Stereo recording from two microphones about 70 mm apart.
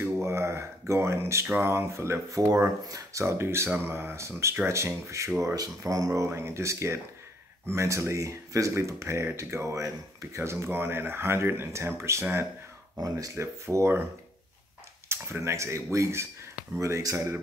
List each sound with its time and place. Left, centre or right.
0.2 s a sound: right
1.6 s speech: right
2.4 s speech: right
5.6 s speech: right
6.2 s speech: right
15.0 s speech: right